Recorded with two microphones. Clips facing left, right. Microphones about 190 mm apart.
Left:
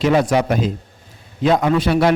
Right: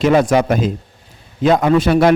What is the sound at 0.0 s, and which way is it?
A man's voice, 50° right (ahead or behind).